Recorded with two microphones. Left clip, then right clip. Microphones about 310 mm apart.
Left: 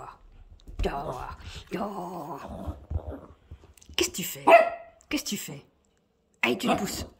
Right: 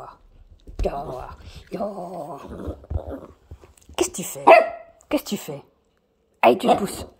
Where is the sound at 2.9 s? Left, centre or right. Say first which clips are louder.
Right 7 dB; right.